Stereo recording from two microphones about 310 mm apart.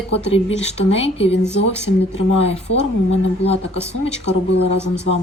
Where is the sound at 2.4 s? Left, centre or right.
Centre.